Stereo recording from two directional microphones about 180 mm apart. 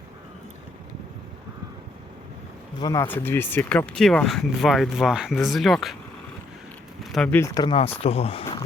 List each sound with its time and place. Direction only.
2.7 s speech: 20° left (ahead or behind); by 6.0 s centre (ahead or behind)
7.0 s speech: centre (ahead or behind); by 8.4 s 35° left (ahead or behind)